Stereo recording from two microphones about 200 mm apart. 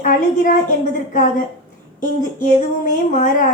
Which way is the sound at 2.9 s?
40° left (ahead or behind).